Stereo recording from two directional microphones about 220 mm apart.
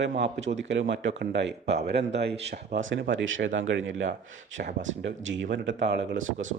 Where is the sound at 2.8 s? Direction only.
60° right (ahead or behind).